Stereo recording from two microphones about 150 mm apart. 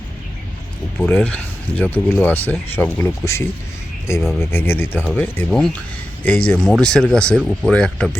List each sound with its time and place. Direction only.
0.9 s speech: 10° left (ahead or behind)